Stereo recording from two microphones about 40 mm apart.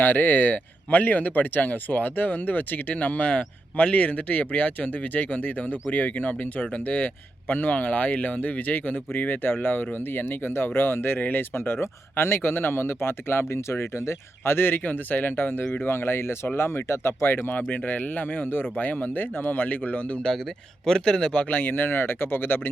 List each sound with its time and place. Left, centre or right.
0.0 s speech: left
5.4 s speech: left
11.2 s speech: left
14.8 s speech: left
15.8 s speech: left
17.7 s speech: left
20.8 s speech: centre
21.5 s speech: left